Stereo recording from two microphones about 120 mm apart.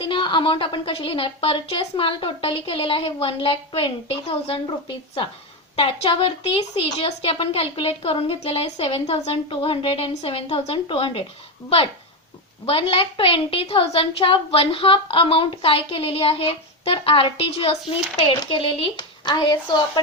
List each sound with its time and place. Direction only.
0.0 s a woman's voice: 45° left (ahead or behind)
12.6 s a woman's voice: 50° left (ahead or behind)